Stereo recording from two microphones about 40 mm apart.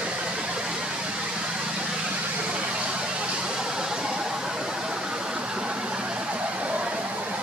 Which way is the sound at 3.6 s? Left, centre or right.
Centre.